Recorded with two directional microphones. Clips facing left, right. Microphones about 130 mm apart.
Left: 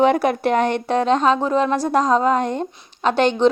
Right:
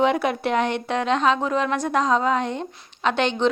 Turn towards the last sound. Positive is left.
turn(degrees=40)  # may be behind; listen again after turning